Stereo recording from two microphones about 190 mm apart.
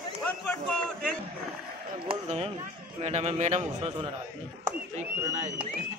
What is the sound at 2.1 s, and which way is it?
A man's voice, 30° right (ahead or behind).